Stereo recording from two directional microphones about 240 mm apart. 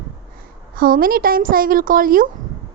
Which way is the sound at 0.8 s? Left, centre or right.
Right.